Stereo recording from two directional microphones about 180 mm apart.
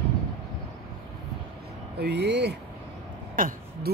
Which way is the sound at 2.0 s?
70° right (ahead or behind).